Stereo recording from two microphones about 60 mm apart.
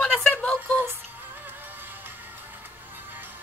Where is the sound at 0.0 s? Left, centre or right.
Centre.